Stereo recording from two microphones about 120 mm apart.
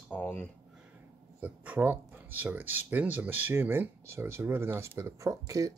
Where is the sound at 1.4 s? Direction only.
15° right (ahead or behind).